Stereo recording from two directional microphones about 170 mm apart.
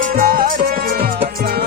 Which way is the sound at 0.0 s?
55° right (ahead or behind).